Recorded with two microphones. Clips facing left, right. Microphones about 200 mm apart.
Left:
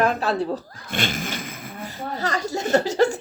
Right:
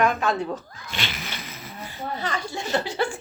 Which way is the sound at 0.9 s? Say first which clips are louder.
Left 7 dB; 50° left (ahead or behind).